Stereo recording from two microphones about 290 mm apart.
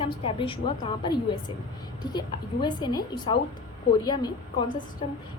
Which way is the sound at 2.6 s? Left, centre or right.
Centre.